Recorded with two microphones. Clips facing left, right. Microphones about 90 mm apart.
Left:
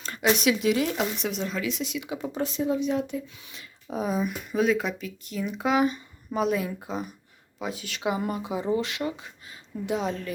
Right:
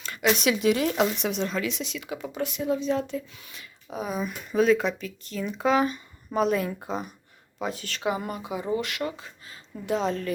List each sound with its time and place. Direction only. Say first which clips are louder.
0.0 s a sound: even; 35° left (ahead or behind)
0.3 s speech: even; 5° left (ahead or behind)
2.1 s speech: left 1 dB; 30° left (ahead or behind)
2.6 s speech: right 2 dB; 15° left (ahead or behind)
3.9 s speech: left 3 dB; 35° left (ahead or behind)
4.2 s speech: right 6 dB; 5° left (ahead or behind)